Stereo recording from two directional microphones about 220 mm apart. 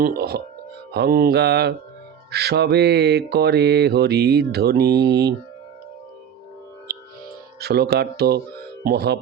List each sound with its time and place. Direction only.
0.0 s mantra: 45° right (ahead or behind)
7.6 s mantra: 45° right (ahead or behind)